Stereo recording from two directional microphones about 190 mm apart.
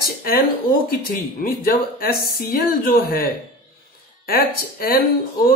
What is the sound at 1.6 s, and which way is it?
Speech, 50° left (ahead or behind).